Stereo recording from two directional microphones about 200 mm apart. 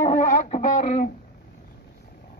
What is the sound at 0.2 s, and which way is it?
Music, 40° left (ahead or behind).